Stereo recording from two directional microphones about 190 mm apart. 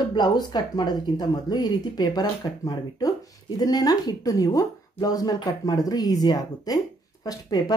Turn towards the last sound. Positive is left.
turn(degrees=20)  # may be behind; listen again after turning